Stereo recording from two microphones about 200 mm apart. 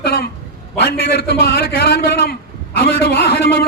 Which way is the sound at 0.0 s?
50° left (ahead or behind).